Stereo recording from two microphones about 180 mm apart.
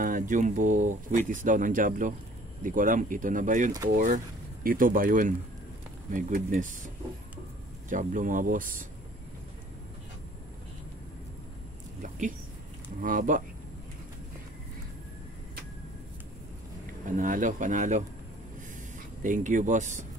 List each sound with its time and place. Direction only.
0.0 s speech: 50° right (ahead or behind)
7.9 s speech: 45° right (ahead or behind)
13.0 s speech: 45° right (ahead or behind)
17.0 s speech: 45° right (ahead or behind)
19.2 s speech: 45° right (ahead or behind)